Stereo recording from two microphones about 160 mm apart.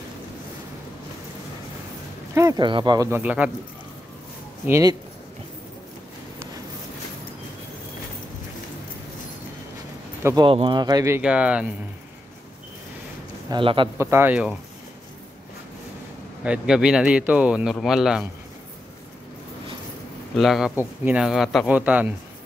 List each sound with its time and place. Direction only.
2.3 s speech: 25° right (ahead or behind)
3.1 s speech: 10° right (ahead or behind)
4.6 s speech: 15° right (ahead or behind)
10.2 s speech: 30° right (ahead or behind)
11.1 s speech: 5° right (ahead or behind)
13.5 s a man's voice: 30° right (ahead or behind)
13.9 s speech: 15° right (ahead or behind)
16.4 s speech: 5° right (ahead or behind)
20.3 s speech: centre (ahead or behind)